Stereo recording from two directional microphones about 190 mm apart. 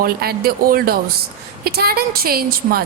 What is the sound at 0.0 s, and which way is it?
A woman's voice, 55° right (ahead or behind).